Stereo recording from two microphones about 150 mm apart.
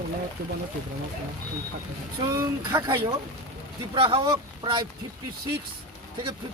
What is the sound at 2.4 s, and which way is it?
Speech, 20° right (ahead or behind).